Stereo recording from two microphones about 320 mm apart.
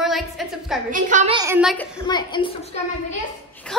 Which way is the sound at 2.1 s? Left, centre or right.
Centre.